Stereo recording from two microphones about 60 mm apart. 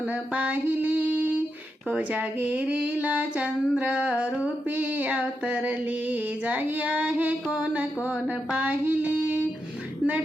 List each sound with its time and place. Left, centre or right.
0.3 s female singing: right
8.5 s child singing: right